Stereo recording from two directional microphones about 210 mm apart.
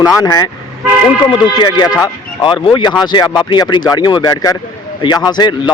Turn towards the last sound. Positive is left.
turn(degrees=20)  # may be behind; listen again after turning